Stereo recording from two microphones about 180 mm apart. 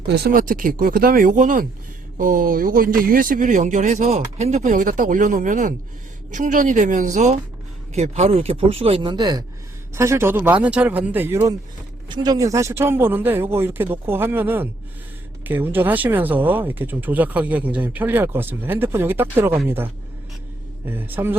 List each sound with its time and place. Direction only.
0.1 s a man's voice: 60° right (ahead or behind); by 11.5 s 10° right (ahead or behind)
12.0 s speech: 25° right (ahead or behind)